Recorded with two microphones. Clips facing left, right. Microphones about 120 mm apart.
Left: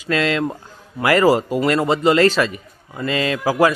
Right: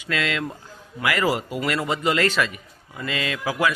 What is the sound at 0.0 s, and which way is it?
A man's voice, 35° left (ahead or behind).